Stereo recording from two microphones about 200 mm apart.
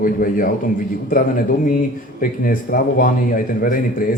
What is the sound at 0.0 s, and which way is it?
Speech, 45° left (ahead or behind).